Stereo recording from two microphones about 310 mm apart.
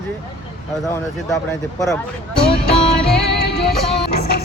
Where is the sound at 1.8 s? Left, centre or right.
Centre.